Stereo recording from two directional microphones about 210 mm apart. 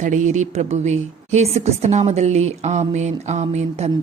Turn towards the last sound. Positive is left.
turn(degrees=-30)  # may be behind; listen again after turning